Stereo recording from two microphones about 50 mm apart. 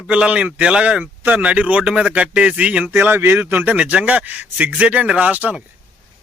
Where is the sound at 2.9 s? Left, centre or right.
Right.